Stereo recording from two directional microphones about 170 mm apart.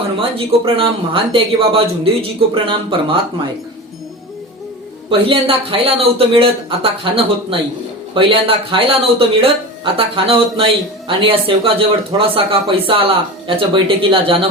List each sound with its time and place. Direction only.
0.2 s speech: 35° right (ahead or behind)
5.0 s speech: 30° right (ahead or behind)